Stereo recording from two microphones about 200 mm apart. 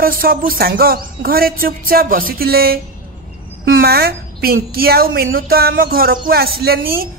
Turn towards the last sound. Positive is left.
turn(degrees=-50)  # may be behind; listen again after turning